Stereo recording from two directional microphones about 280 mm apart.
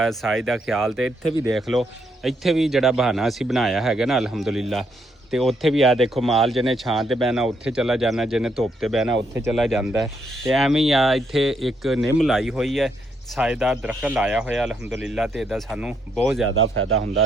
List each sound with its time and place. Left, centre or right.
0.0 s speech: centre
16.7 s a man's voice: right